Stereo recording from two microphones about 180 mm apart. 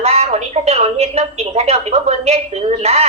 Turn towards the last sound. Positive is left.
turn(degrees=-35)  # may be behind; listen again after turning